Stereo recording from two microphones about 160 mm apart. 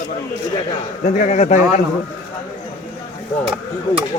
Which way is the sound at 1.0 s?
45° left (ahead or behind).